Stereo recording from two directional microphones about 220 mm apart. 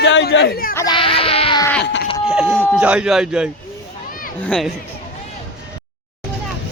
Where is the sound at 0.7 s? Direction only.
20° left (ahead or behind).